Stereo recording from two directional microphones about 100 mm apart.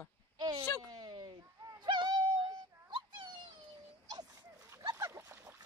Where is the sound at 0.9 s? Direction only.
45° right (ahead or behind).